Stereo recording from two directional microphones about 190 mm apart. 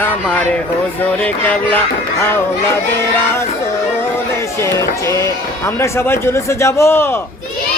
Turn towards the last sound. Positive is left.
turn(degrees=15)  # may be behind; listen again after turning